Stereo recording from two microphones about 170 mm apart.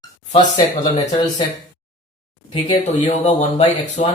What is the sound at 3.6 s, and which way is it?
Speech, 30° left (ahead or behind).